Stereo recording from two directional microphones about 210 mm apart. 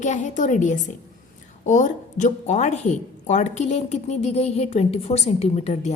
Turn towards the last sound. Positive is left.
turn(degrees=30)  # may be behind; listen again after turning